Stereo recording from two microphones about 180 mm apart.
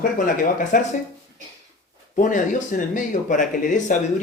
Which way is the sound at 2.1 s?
45° left (ahead or behind).